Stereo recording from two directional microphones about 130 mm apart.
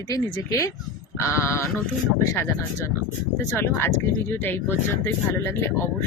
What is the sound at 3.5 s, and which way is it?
Speech, 15° left (ahead or behind).